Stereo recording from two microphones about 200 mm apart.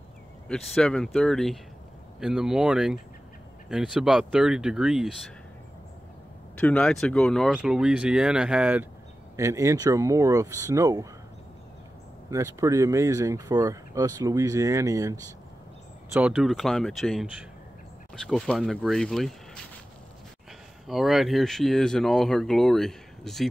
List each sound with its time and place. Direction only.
0.5 s speech: 5° left (ahead or behind)
6.5 s speech: 5° left (ahead or behind); by 11.1 s 15° right (ahead or behind)
12.3 s speech: 15° right (ahead or behind)
16.1 s speech: 5° right (ahead or behind)
20.8 s speech: centre (ahead or behind)